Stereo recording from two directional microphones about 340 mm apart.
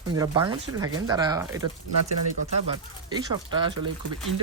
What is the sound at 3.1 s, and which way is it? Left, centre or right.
Speech, centre.